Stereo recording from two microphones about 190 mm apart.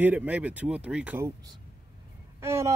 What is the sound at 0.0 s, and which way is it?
Speech, 10° right (ahead or behind).